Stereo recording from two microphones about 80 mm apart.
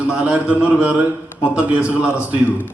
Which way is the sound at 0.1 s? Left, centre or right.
Centre.